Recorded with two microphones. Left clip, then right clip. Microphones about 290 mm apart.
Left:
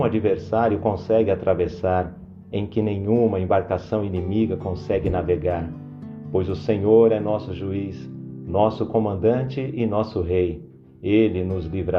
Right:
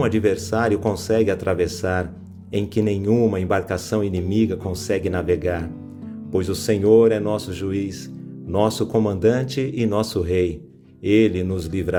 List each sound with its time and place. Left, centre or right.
0.0 s speech: right